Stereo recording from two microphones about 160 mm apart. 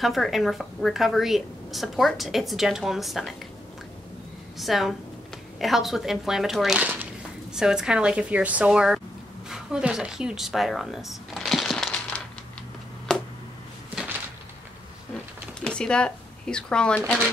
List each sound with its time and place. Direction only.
0.0 s a woman's voice: centre (ahead or behind)
4.6 s a woman's voice: centre (ahead or behind)
13.1 s a sound: 5° left (ahead or behind)
15.6 s speech: 5° left (ahead or behind)